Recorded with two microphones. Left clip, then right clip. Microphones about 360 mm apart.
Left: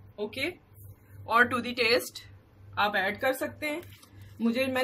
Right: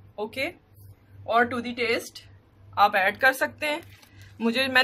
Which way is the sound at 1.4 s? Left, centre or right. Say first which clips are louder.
Even; centre.